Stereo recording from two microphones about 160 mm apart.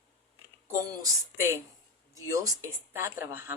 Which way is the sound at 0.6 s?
15° right (ahead or behind).